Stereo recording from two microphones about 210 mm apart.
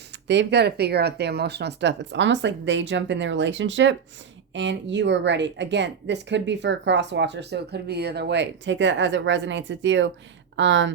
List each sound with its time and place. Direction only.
0.3 s a woman's voice: 55° right (ahead or behind)